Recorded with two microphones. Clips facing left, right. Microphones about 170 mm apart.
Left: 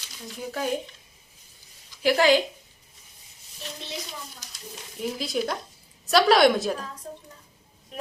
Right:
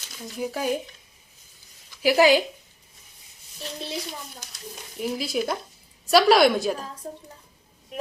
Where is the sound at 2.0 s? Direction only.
10° right (ahead or behind).